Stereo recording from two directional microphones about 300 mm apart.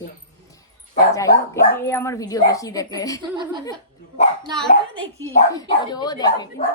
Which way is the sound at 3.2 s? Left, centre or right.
Centre.